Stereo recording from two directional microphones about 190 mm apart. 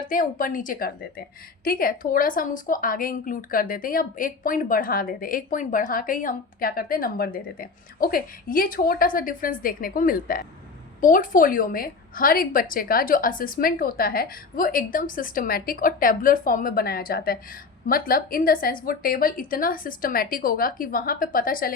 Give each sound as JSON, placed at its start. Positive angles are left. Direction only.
{"t": 0.0, "sound": "a woman's voice", "side_deg": 45}